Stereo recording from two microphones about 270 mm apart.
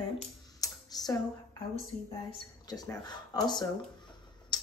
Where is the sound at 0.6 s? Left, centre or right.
Centre.